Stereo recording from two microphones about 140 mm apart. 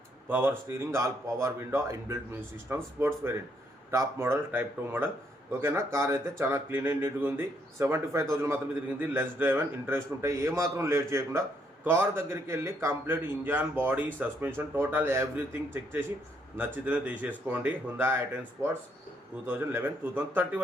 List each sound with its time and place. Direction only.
0.3 s a man's voice: 15° right (ahead or behind)